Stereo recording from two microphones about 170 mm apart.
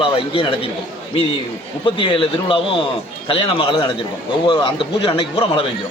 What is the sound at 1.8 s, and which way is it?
A man's voice, 30° left (ahead or behind).